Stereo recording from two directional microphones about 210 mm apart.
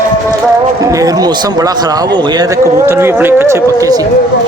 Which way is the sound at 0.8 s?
15° right (ahead or behind).